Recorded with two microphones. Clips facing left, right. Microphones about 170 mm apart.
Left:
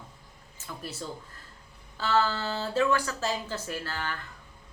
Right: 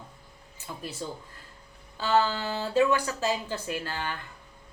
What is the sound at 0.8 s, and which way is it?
Speech, 15° right (ahead or behind).